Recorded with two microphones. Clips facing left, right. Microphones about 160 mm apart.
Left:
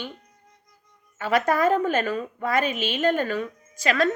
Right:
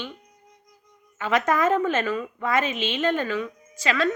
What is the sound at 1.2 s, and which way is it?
A woman's voice, 40° left (ahead or behind).